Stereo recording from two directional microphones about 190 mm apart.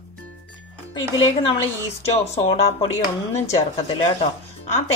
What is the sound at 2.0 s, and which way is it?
A woman's voice, 35° left (ahead or behind).